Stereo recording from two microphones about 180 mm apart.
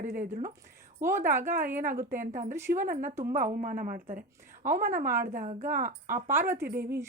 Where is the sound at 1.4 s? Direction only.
50° right (ahead or behind).